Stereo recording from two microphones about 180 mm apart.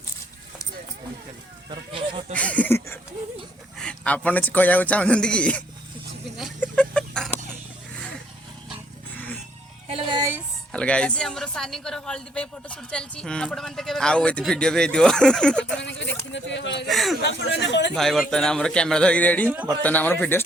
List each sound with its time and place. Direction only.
1.9 s speech: 30° right (ahead or behind)
2.3 s speech: 5° left (ahead or behind)
6.6 s chicken: 5° left (ahead or behind)
7.9 s vehicle: 5° left (ahead or behind)
9.1 s music: 10° left (ahead or behind)
9.9 s music: 25° right (ahead or behind)
10.7 s a woman's voice: 5° left (ahead or behind)
15.8 s speech: 80° left
16.9 s a woman's voice: centre (ahead or behind)
17.2 s speech: 85° left
17.9 s a woman's voice: centre (ahead or behind)
19.5 s a man's voice: 10° right (ahead or behind)
19.8 s speech: 10° left (ahead or behind)